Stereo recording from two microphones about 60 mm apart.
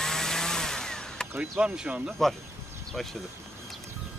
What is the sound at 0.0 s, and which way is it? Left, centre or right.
Chainsaw, centre.